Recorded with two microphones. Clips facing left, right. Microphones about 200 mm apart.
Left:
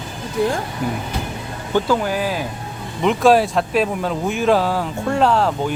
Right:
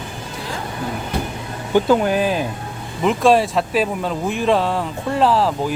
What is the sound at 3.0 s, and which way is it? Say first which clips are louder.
Speech: left 1 dB; centre (ahead or behind).